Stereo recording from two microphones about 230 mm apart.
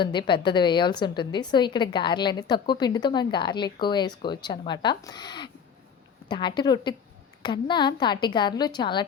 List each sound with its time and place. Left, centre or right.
0.0 s a woman's voice: centre